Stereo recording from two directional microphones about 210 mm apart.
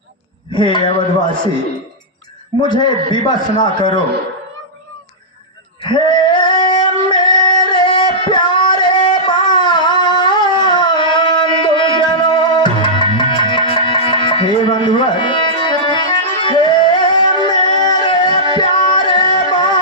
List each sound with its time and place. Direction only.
0.5 s speech: 20° left (ahead or behind)
2.6 s a man's voice: 20° left (ahead or behind)
5.8 s female singing: 20° left (ahead or behind)
7.1 s singing: 20° left (ahead or behind)
9.2 s a sound: 20° left (ahead or behind)
15.9 s music: 20° left (ahead or behind)